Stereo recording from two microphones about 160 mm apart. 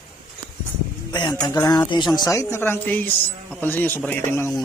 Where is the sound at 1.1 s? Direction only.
25° left (ahead or behind).